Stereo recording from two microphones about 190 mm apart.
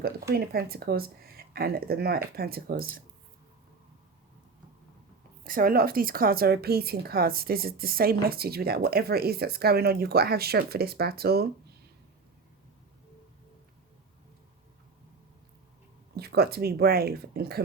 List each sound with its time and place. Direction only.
0.0 s a woman's voice: 55° right (ahead or behind)
5.5 s a woman's voice: 50° right (ahead or behind)
16.1 s speech: 55° right (ahead or behind)